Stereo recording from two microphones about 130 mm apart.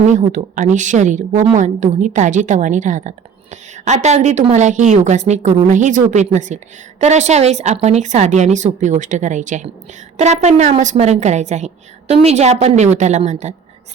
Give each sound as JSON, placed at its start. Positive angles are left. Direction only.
{"t": 0.1, "sound": "a woman's voice", "side_deg": -70}
{"t": 10.2, "sound": "a woman's voice", "side_deg": -60}